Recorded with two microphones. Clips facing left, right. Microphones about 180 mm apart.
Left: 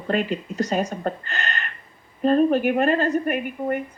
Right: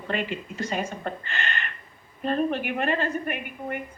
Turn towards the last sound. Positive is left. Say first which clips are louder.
# left 7 dB
turn(degrees=40)  # may be behind; listen again after turning